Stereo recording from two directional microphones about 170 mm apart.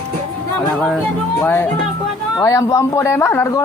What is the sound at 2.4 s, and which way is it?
A man's voice, 20° left (ahead or behind).